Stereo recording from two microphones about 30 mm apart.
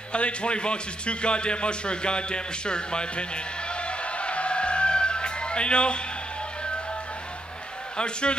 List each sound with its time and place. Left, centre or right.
0.1 s a man's voice: left
8.0 s a man's voice: left